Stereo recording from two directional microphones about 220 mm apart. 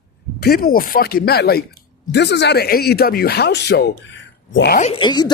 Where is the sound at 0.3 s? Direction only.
45° left (ahead or behind).